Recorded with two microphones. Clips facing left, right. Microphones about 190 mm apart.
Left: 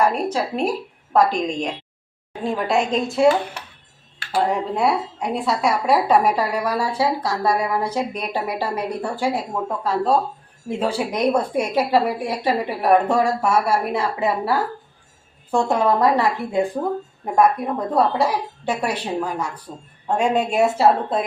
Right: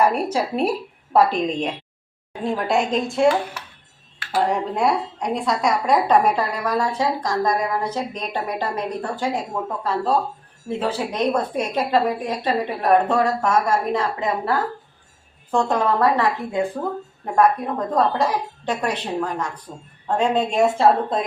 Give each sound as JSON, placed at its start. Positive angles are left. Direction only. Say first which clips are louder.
{"t": 0.0, "sound": "speech", "louder": "even", "side_deg": -10}
{"t": 4.4, "sound": "a woman's voice", "louder": "even", "side_deg": 0}
{"t": 15.5, "sound": "a woman's voice", "louder": "left 1 dB", "side_deg": 10}
{"t": 19.7, "sound": "speech", "louder": "left 1 dB", "side_deg": -5}
{"t": 20.1, "sound": "a woman's voice", "louder": "even", "side_deg": 10}